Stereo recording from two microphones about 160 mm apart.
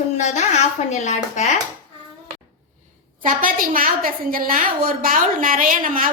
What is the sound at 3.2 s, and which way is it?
A woman's voice, 60° right (ahead or behind).